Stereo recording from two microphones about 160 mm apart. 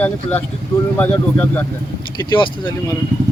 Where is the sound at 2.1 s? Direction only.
30° left (ahead or behind).